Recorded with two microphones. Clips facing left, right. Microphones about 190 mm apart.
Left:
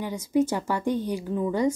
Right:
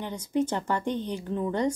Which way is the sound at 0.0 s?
10° left (ahead or behind).